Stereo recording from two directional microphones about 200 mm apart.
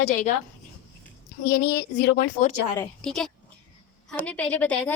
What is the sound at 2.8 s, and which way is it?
A woman's voice, 5° left (ahead or behind).